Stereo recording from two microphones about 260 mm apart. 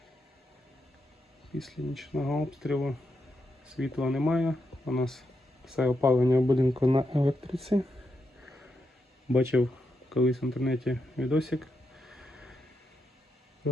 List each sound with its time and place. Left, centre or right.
1.5 s speech: centre; by 7.5 s right
8.4 s a sound: centre
9.3 s speech: centre